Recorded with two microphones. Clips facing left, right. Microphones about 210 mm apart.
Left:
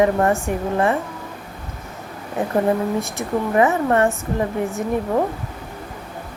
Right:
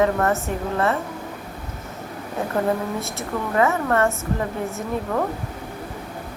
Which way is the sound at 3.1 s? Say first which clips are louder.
Left 3 dB; 15° left (ahead or behind).